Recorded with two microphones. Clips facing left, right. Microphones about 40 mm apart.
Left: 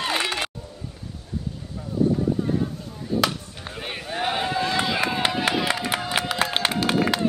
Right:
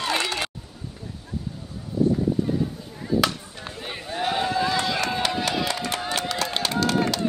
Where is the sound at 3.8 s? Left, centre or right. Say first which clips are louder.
Left 1 dB; left.